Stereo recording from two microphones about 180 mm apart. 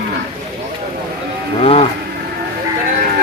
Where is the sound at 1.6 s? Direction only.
35° left (ahead or behind).